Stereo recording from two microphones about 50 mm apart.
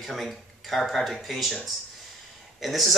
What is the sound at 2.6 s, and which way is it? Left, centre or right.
Speech, centre.